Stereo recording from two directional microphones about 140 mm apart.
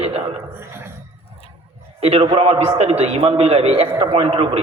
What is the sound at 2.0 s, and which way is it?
A man's voice, 45° right (ahead or behind).